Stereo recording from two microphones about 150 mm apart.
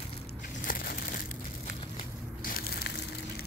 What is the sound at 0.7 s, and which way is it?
Crumpling, 70° left (ahead or behind).